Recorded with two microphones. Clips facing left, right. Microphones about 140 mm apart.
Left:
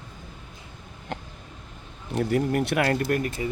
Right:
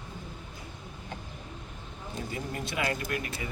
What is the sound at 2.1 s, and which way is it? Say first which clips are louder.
Speech: left 13 dB; 75° left (ahead or behind).